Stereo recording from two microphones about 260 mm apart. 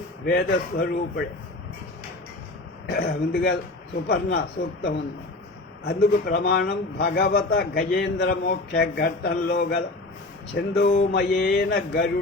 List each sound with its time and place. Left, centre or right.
0.3 s a man's voice: left
2.9 s a man's voice: left
5.8 s a man's voice: left